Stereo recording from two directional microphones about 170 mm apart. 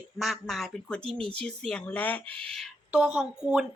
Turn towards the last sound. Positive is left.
turn(degrees=-5)  # may be behind; listen again after turning